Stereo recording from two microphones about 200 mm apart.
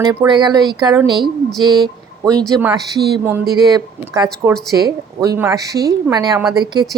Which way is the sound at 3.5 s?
20° right (ahead or behind).